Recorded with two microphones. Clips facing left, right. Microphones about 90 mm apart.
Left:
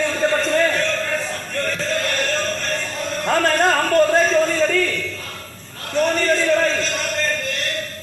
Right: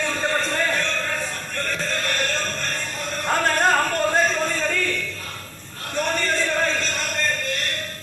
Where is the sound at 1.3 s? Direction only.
45° left (ahead or behind).